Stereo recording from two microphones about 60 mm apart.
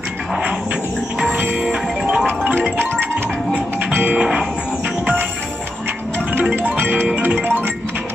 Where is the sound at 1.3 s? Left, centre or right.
Right.